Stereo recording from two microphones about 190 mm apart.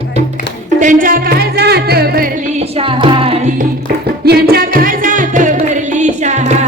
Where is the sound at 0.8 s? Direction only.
45° right (ahead or behind).